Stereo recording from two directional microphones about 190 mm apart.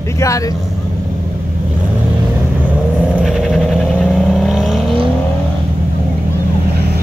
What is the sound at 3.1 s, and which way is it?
Vehicle, centre (ahead or behind).